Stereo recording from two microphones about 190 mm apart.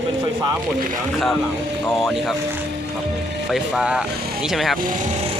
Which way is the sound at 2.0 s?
Centre (ahead or behind).